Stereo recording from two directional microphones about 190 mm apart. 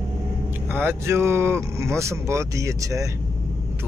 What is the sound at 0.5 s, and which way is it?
Speech, 10° right (ahead or behind).